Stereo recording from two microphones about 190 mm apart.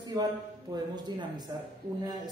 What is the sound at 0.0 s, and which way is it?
A man's voice, 20° right (ahead or behind).